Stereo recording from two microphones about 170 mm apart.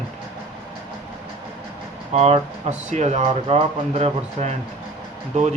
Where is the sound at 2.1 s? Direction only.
40° right (ahead or behind).